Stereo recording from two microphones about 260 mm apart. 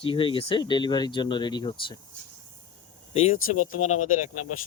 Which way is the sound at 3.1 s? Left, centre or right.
Left.